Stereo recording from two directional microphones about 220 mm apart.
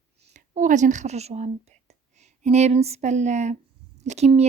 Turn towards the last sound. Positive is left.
turn(degrees=-30)  # may be behind; listen again after turning